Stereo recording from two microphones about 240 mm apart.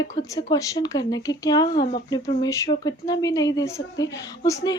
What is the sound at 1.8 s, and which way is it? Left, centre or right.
Speech, left.